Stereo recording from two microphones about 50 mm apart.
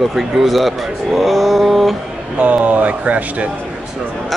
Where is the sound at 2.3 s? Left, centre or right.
Right.